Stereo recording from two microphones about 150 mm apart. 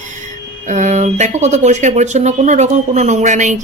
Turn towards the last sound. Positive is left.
turn(degrees=-55)  # may be behind; listen again after turning